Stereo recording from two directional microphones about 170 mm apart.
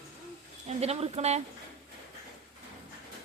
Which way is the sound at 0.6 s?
40° right (ahead or behind).